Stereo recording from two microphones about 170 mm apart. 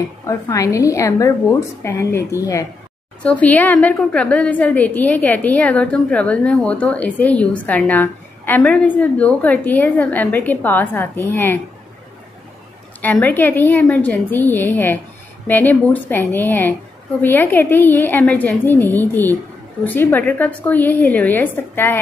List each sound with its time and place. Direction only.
0.3 s a woman's voice: 20° left (ahead or behind)
13.0 s a woman's voice: 10° left (ahead or behind)